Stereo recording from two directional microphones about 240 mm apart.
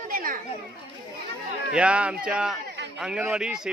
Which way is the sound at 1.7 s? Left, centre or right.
Centre.